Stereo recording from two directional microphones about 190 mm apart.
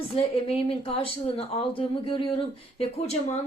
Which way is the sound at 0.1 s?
30° left (ahead or behind).